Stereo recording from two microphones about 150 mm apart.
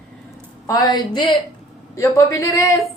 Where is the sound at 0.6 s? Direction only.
25° left (ahead or behind).